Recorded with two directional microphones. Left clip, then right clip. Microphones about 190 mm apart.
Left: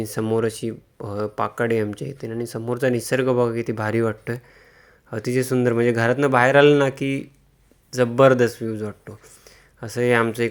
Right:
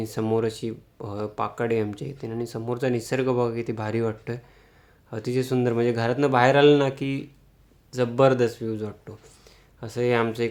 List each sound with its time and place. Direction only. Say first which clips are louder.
0.0 s speech: left 3 dB; 15° left (ahead or behind)